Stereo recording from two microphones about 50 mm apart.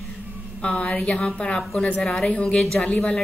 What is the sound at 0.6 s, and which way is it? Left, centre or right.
A woman's voice, centre.